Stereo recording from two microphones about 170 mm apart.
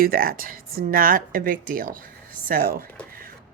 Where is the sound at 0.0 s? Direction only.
60° right (ahead or behind).